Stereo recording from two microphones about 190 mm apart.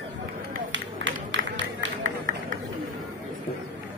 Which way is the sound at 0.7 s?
70° right (ahead or behind).